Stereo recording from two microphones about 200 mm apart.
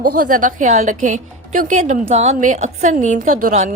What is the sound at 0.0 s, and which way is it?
A woman's voice, 45° right (ahead or behind).